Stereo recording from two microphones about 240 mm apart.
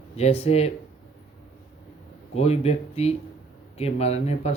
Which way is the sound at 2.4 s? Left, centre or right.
Left.